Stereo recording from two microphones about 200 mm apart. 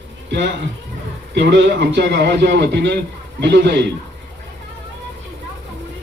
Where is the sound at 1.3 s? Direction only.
60° right (ahead or behind).